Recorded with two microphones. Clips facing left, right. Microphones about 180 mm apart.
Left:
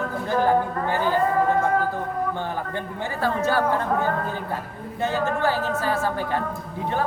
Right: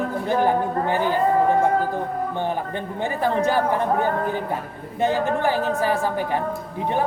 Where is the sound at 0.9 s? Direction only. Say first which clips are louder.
Right 1 dB; 15° right (ahead or behind).